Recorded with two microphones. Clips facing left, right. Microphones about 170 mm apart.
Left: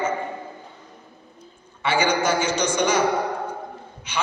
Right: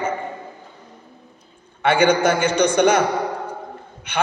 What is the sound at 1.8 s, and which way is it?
A man's voice, 55° right (ahead or behind).